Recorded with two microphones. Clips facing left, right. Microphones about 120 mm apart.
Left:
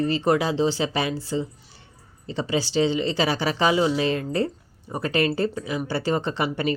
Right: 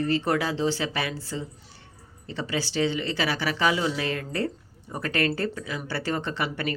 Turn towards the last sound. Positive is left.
turn(degrees=20)  # may be behind; listen again after turning